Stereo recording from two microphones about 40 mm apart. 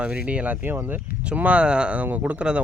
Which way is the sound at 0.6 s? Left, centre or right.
Right.